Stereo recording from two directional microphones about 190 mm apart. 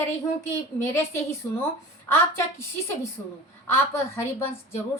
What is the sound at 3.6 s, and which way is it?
A woman's voice, 15° left (ahead or behind).